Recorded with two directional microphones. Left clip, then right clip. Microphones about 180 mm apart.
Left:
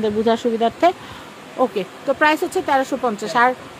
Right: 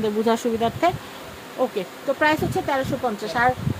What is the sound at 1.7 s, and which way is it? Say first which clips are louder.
Speech: left 4 dB; 30° left (ahead or behind).